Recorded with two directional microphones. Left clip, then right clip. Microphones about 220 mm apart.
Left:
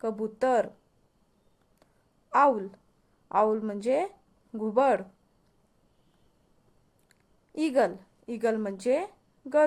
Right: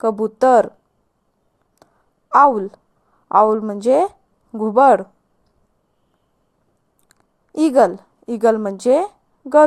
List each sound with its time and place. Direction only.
0.0 s speech: 25° right (ahead or behind)
2.3 s a man's voice: 25° right (ahead or behind)
7.1 s a woman's voice: 25° right (ahead or behind)